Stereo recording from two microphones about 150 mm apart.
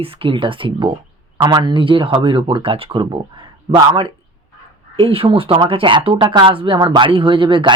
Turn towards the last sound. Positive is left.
turn(degrees=-35)  # may be behind; listen again after turning